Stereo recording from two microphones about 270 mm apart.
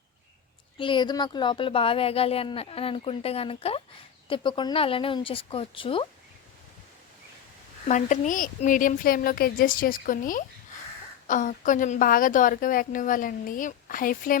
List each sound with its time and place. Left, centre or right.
0.8 s a woman's voice: centre
7.9 s a woman's voice: left